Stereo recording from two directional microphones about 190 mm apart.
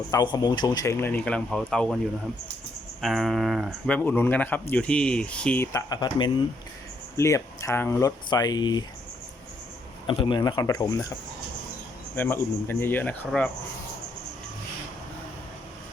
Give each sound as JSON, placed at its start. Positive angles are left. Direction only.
{"t": 0.1, "sound": "speech", "side_deg": 20}
{"t": 3.0, "sound": "speech", "side_deg": 0}
{"t": 10.1, "sound": "speech", "side_deg": 25}
{"t": 12.1, "sound": "speech", "side_deg": 10}